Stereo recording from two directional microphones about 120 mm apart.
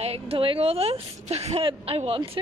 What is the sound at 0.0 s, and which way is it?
A woman's voice, 55° right (ahead or behind).